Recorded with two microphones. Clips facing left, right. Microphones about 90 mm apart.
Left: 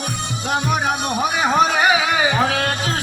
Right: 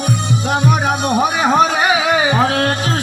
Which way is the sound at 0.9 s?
35° right (ahead or behind).